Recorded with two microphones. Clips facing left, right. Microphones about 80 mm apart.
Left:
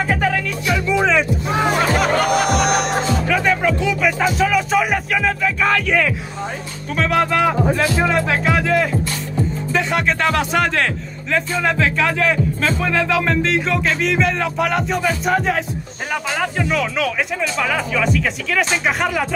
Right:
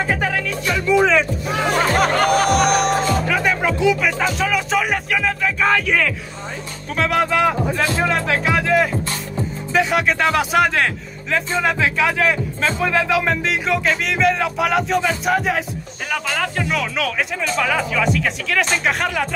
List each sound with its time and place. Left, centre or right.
0.9 s music: centre
2.0 s music: right
3.3 s music: centre
4.0 s music: centre
7.0 s music: centre